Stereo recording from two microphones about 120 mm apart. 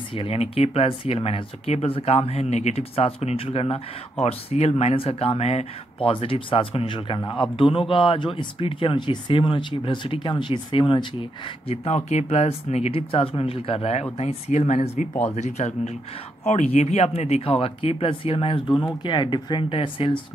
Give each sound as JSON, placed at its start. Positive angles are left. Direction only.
{"t": 0.1, "sound": "speech", "side_deg": 50}
{"t": 14.1, "sound": "speech", "side_deg": 65}